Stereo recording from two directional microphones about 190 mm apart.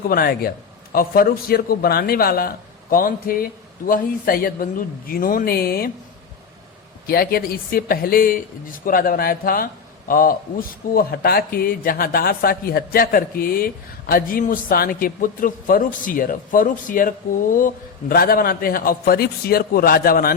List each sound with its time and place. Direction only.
0.1 s a man's voice: 50° left (ahead or behind)
7.1 s a man's voice: 50° left (ahead or behind)